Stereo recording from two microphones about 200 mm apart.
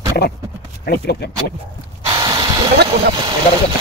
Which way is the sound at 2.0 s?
25° right (ahead or behind).